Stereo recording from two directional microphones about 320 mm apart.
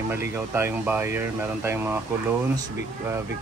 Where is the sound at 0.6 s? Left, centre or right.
Centre.